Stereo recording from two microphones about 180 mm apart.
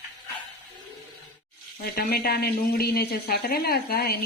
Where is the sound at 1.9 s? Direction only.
60° left (ahead or behind).